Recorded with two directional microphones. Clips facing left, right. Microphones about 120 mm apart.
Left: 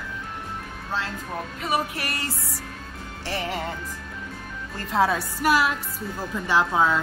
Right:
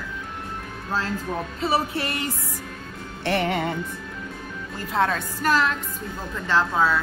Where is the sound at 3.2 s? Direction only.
65° right (ahead or behind).